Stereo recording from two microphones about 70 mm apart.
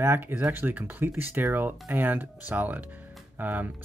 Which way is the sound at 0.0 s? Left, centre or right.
Right.